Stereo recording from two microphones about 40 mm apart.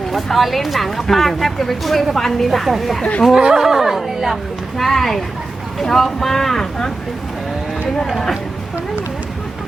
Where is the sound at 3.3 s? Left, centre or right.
Centre.